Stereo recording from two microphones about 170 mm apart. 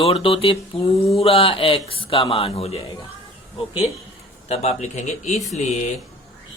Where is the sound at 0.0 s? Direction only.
30° left (ahead or behind).